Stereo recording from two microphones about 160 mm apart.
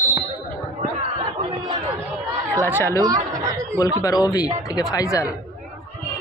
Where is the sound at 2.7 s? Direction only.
15° left (ahead or behind).